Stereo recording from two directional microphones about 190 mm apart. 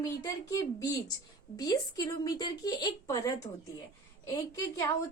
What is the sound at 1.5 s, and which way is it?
Speech, 20° left (ahead or behind).